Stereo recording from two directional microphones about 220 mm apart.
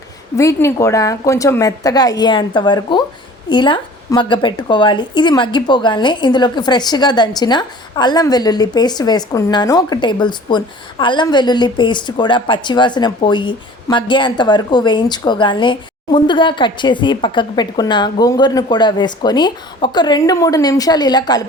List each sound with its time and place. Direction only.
0.3 s a woman's voice: 15° left (ahead or behind)